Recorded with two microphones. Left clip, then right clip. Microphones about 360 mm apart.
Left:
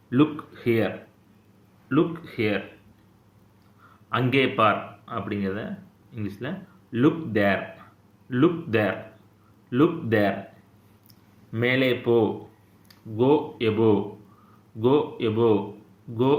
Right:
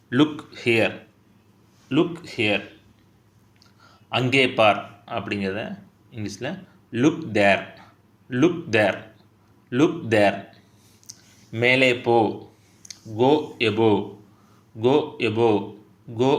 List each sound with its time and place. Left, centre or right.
0.1 s speech: right
1.9 s speech: centre
4.1 s speech: centre
11.5 s speech: right